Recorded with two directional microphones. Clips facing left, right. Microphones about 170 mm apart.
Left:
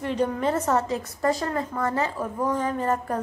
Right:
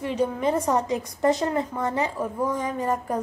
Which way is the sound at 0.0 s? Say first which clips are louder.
Even; 10° right (ahead or behind).